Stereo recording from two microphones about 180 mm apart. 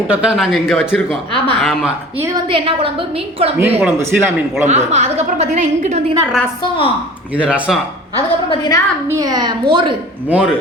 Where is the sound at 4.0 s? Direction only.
15° right (ahead or behind).